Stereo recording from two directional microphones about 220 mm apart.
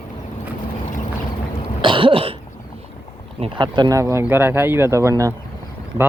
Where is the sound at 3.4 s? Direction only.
20° right (ahead or behind).